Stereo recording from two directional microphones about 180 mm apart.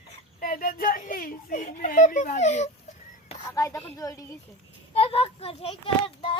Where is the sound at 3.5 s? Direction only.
15° left (ahead or behind).